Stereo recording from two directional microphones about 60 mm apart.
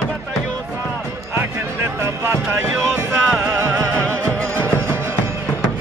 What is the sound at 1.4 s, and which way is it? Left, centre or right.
Music, right.